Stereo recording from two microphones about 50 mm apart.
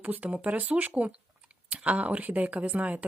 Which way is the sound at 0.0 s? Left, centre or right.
Right.